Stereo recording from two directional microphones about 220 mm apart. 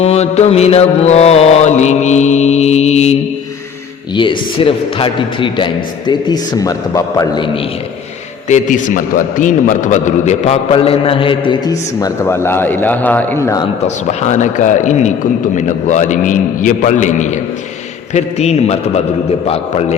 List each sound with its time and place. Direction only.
0.0 s a man's voice: 30° left (ahead or behind)
8.4 s a man's voice: 35° left (ahead or behind); by 13.7 s 15° left (ahead or behind)
13.8 s a man's voice: 30° left (ahead or behind)